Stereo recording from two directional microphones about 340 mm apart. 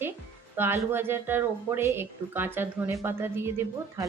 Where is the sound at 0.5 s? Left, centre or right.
Centre.